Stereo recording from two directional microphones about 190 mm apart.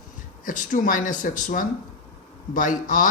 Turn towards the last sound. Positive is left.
turn(degrees=45)  # may be behind; listen again after turning